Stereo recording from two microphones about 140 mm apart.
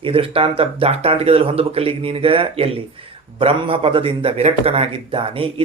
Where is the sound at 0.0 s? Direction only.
40° right (ahead or behind).